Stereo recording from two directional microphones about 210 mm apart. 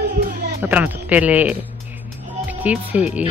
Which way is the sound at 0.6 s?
5° right (ahead or behind).